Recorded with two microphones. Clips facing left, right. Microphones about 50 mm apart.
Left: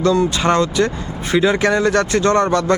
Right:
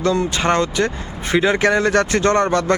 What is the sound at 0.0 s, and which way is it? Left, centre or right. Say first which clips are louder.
Speech: left 3 dB; right.